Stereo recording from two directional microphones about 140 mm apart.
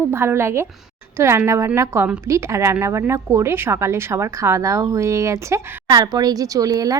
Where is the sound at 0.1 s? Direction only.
15° right (ahead or behind).